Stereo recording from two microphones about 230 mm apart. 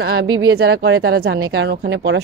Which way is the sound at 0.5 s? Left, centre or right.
Right.